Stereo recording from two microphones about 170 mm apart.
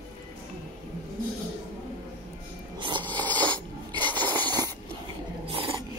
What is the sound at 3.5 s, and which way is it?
Cough, 25° right (ahead or behind).